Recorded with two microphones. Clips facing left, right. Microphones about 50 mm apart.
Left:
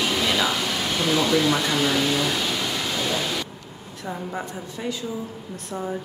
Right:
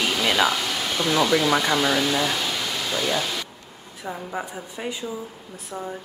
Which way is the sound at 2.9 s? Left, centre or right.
Centre.